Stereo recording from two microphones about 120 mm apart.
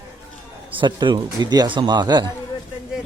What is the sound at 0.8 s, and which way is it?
A man's voice, 40° right (ahead or behind).